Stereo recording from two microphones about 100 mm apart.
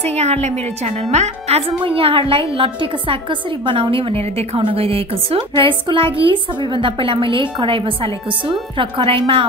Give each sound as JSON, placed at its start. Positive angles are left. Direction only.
{"t": 0.0, "sound": "a woman's voice", "side_deg": -90}
{"t": 1.5, "sound": "a woman's voice", "side_deg": -75}